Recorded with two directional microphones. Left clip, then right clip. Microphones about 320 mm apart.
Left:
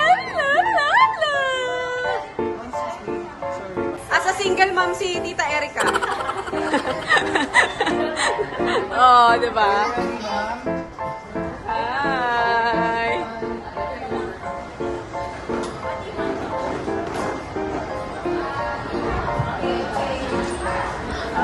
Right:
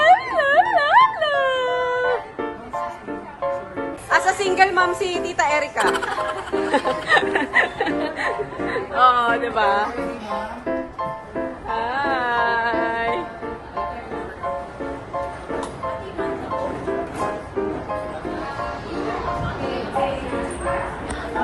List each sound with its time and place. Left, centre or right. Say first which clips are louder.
0.0 s dog: right 3 dB; centre
4.1 s a woman's voice: right 2 dB; centre
11.7 s a sound: even; centre